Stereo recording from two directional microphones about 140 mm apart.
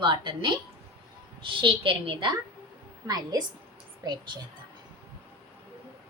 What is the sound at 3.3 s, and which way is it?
Speech, 25° right (ahead or behind).